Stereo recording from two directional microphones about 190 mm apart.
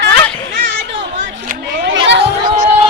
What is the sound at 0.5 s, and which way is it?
Children playing, 65° right (ahead or behind).